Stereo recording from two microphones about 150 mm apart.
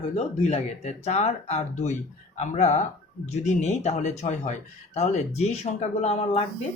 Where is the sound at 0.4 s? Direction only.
45° left (ahead or behind).